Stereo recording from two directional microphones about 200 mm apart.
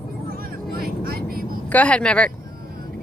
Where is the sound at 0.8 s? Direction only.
50° right (ahead or behind).